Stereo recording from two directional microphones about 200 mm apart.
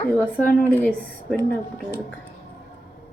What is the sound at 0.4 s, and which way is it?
Speech, 10° left (ahead or behind).